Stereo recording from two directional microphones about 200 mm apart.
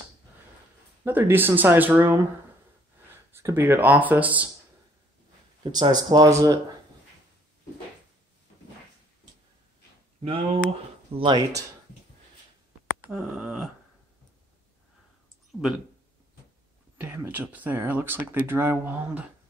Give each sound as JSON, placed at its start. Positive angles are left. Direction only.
{"t": 1.0, "sound": "speech", "side_deg": -10}
{"t": 3.3, "sound": "speech", "side_deg": -10}
{"t": 5.6, "sound": "speech", "side_deg": -20}
{"t": 10.2, "sound": "speech", "side_deg": -30}
{"t": 13.0, "sound": "a sound", "side_deg": -5}
{"t": 17.0, "sound": "speech", "side_deg": -10}